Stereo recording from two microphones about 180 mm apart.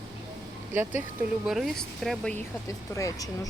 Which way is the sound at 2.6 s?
20° left (ahead or behind).